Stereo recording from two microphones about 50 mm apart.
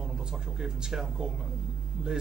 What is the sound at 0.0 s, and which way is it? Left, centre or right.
Speech, centre.